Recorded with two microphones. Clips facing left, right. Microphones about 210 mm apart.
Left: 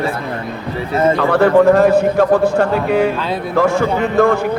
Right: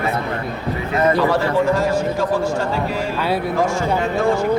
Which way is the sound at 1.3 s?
60° left (ahead or behind).